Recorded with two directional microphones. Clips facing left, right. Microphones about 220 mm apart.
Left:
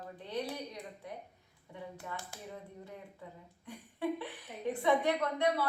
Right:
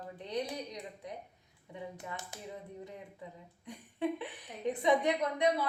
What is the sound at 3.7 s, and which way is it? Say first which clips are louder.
A woman's voice: right 1 dB; 20° right (ahead or behind).